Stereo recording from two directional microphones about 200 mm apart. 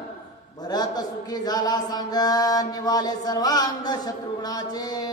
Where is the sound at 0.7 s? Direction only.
20° left (ahead or behind).